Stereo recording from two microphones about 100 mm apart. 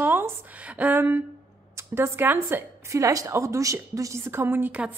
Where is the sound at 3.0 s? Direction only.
35° right (ahead or behind).